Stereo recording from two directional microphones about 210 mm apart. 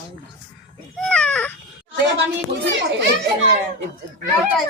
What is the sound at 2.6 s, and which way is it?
Speech, 60° right (ahead or behind).